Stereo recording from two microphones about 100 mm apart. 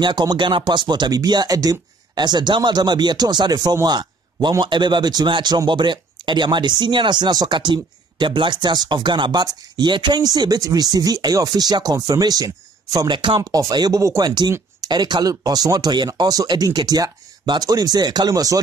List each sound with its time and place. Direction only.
0.0 s speech: 45° right (ahead or behind)
13.1 s speech: 50° right (ahead or behind); by 18.6 s 35° right (ahead or behind)